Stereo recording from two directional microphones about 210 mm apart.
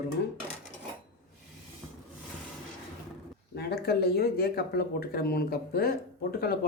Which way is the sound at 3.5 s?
50° left (ahead or behind).